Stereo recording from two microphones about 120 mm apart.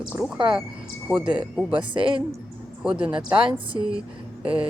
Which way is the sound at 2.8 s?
5° right (ahead or behind).